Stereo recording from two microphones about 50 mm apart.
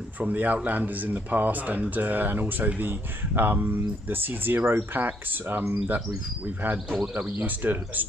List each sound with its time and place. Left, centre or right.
0.2 s speech: right